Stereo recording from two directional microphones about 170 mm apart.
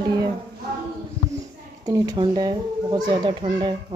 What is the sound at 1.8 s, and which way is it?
Speech, 20° right (ahead or behind).